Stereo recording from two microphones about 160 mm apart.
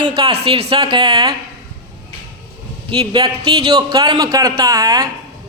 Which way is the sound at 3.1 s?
30° right (ahead or behind).